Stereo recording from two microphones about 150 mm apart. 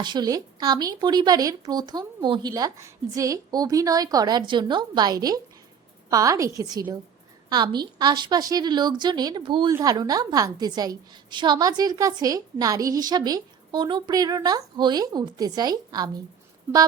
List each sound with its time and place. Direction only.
0.0 s a woman's voice: 30° right (ahead or behind)